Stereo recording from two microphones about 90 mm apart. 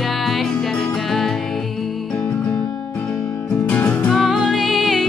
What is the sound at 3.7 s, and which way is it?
Music, 15° left (ahead or behind).